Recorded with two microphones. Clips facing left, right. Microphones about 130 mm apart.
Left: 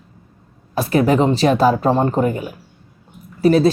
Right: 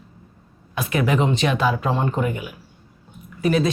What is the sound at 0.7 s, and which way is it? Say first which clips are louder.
Speech: left 6 dB; 35° left (ahead or behind).